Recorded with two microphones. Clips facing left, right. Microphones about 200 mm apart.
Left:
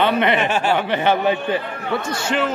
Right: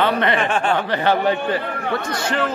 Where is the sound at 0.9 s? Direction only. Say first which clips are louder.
Right 1 dB; 20° left (ahead or behind).